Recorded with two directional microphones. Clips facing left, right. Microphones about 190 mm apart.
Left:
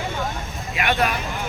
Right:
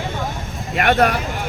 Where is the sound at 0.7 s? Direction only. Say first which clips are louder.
Right 6 dB; 45° right (ahead or behind).